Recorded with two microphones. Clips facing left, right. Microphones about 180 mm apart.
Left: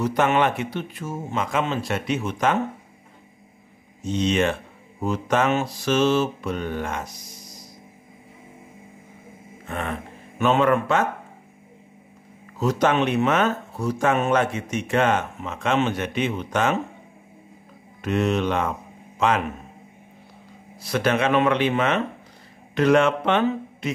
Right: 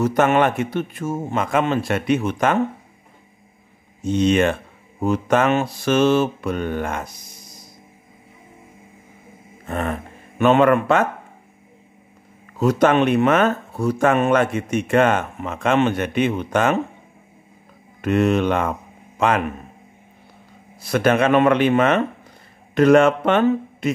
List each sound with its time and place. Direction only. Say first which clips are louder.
0.0 s a man's voice: right 4 dB; 50° right (ahead or behind)
4.0 s a man's voice: right 5 dB; 55° right (ahead or behind)
9.7 s a sound: right 5 dB; 40° right (ahead or behind)
10.4 s speech: right 4 dB; 60° right (ahead or behind)
12.5 s speech: right 4 dB; 55° right (ahead or behind)
18.0 s speech: right 5 dB; 55° right (ahead or behind)
20.8 s a man's voice: right 4 dB; 50° right (ahead or behind)